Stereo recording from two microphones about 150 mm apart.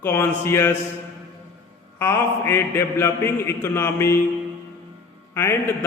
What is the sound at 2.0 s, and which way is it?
A man's voice, 15° left (ahead or behind).